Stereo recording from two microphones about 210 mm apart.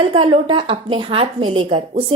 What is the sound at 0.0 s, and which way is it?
Speech, 25° right (ahead or behind).